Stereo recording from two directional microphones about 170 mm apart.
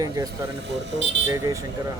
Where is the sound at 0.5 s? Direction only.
90° right.